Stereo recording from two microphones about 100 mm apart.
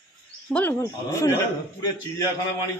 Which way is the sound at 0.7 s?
30° left (ahead or behind).